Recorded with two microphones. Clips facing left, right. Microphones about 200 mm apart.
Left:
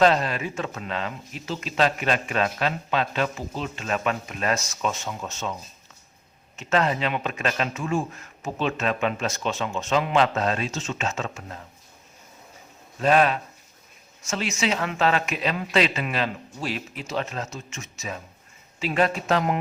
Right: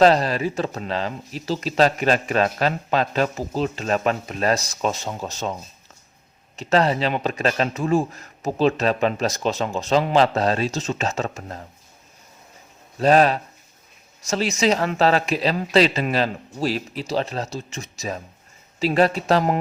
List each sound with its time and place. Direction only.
0.0 s speech: 35° right (ahead or behind)
6.6 s speech: 35° right (ahead or behind)
13.0 s speech: 35° right (ahead or behind)